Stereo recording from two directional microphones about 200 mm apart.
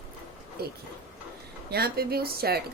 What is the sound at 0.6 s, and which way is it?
A woman's voice, 50° right (ahead or behind).